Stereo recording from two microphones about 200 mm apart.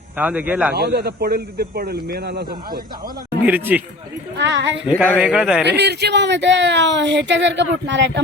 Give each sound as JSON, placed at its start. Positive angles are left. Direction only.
{"t": 0.2, "sound": "a man's voice", "side_deg": -5}
{"t": 0.7, "sound": "a man's voice", "side_deg": -50}
{"t": 3.4, "sound": "a man's voice", "side_deg": -10}
{"t": 4.4, "sound": "speech", "side_deg": -65}
{"t": 4.9, "sound": "a man's voice", "side_deg": 10}
{"t": 5.2, "sound": "speech", "side_deg": -5}
{"t": 5.6, "sound": "speech", "side_deg": -55}